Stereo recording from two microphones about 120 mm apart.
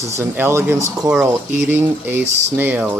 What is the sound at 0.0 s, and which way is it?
Speech, 25° right (ahead or behind).